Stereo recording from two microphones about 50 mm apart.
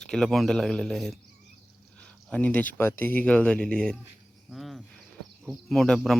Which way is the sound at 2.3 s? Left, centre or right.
Left.